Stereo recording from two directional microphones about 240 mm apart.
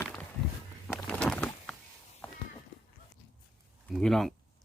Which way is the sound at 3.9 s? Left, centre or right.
Centre.